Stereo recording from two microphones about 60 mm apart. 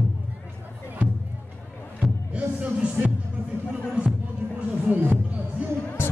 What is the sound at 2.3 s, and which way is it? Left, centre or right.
Music, right.